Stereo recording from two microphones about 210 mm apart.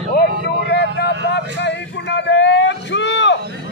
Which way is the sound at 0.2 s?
55° left (ahead or behind).